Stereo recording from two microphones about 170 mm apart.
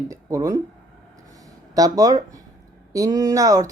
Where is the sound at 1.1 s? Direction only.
20° right (ahead or behind).